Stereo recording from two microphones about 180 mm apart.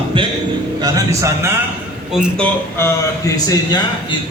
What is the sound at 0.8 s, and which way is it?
Speech, 20° right (ahead or behind).